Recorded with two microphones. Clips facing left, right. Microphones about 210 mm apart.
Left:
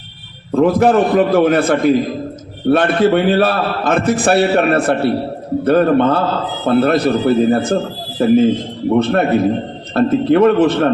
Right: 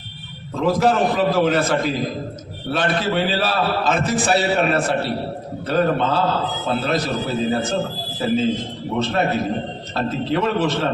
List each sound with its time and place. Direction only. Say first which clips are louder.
0.5 s a man's voice: left 7 dB; 55° left (ahead or behind)